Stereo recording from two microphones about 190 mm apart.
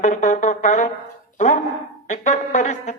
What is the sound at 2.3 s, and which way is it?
Speech, 35° left (ahead or behind).